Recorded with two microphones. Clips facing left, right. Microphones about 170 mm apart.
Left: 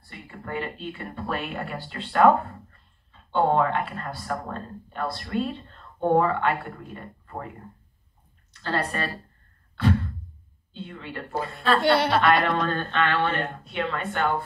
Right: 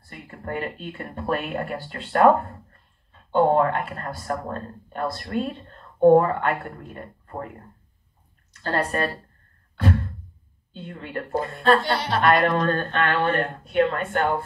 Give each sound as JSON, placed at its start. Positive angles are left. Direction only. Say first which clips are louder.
{"t": 0.1, "sound": "a woman's voice", "louder": "right 2 dB", "side_deg": -45}
{"t": 8.6, "sound": "a woman's voice", "louder": "right 3 dB", "side_deg": -45}
{"t": 10.7, "sound": "a woman's voice", "louder": "right 3 dB", "side_deg": -45}
{"t": 11.8, "sound": "speech", "louder": "left 5 dB", "side_deg": 65}
{"t": 12.2, "sound": "a woman's voice", "louder": "right 2 dB", "side_deg": -45}